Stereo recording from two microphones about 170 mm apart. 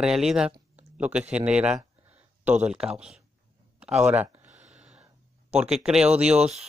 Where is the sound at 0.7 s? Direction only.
10° right (ahead or behind).